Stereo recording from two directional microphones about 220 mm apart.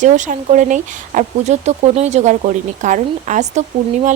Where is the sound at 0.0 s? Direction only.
35° right (ahead or behind).